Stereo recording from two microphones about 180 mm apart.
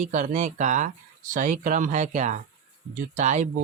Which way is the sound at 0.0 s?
45° right (ahead or behind).